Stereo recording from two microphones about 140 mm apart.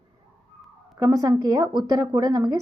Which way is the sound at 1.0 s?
25° right (ahead or behind).